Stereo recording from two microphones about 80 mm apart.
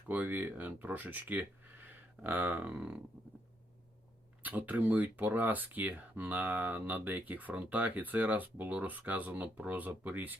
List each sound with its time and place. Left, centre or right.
0.1 s speech: right
4.4 s speech: right